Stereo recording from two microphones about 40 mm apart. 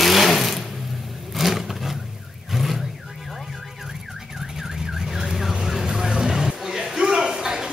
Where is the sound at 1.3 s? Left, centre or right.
Centre.